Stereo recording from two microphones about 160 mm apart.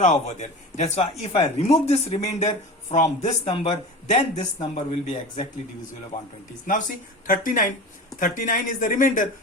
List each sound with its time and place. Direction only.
0.0 s speech: 45° left (ahead or behind)
6.7 s speech: 55° left (ahead or behind)